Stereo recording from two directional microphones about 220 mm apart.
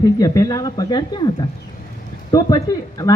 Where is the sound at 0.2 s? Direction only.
15° left (ahead or behind).